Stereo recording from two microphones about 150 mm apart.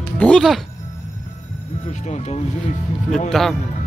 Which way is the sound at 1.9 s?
50° left (ahead or behind).